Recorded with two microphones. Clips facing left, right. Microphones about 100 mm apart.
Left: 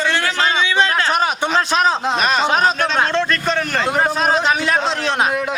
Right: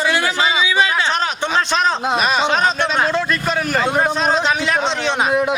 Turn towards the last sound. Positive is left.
turn(degrees=0)  # may be behind; listen again after turning